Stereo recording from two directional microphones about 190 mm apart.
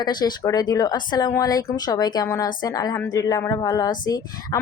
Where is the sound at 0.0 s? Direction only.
20° left (ahead or behind).